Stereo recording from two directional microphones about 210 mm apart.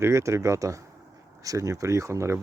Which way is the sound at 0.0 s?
15° right (ahead or behind).